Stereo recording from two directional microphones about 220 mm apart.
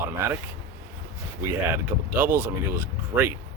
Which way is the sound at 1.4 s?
10° right (ahead or behind).